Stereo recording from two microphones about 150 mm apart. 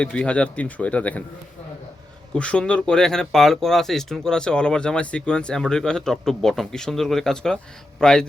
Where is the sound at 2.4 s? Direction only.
5° left (ahead or behind).